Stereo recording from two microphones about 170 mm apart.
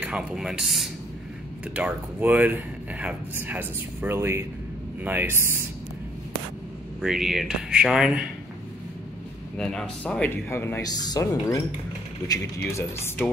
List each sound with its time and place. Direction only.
0.0 s speech: 5° right (ahead or behind)
7.0 s speech: centre (ahead or behind)
9.6 s speech: 5° left (ahead or behind); by 11.2 s 25° left (ahead or behind)
12.3 s speech: 15° left (ahead or behind)